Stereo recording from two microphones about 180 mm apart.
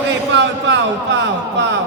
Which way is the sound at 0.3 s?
85° right.